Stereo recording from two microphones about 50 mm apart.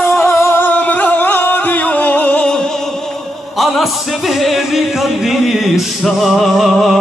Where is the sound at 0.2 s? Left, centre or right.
Left.